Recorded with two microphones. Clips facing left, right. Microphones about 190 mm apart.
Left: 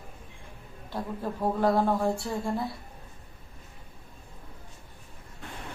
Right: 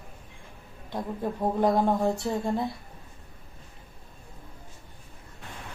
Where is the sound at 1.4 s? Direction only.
20° right (ahead or behind).